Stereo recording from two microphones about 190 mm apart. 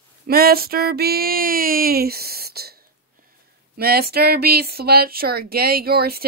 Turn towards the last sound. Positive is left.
turn(degrees=-55)  # may be behind; listen again after turning